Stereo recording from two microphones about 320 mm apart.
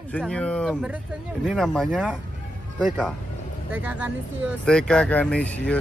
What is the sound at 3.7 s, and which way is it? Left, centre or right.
Speech, centre.